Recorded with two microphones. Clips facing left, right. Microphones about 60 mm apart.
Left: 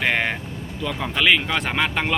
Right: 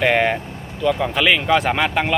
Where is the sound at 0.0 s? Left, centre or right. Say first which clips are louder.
Right 5 dB; centre.